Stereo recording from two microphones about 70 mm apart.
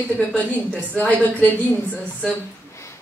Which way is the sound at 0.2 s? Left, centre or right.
Centre.